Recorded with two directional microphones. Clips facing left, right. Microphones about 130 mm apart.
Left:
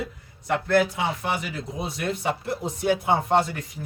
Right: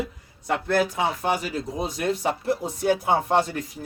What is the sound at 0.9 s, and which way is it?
Speech, 40° right (ahead or behind).